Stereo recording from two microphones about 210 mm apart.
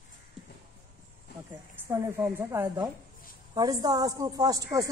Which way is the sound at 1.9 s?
10° right (ahead or behind).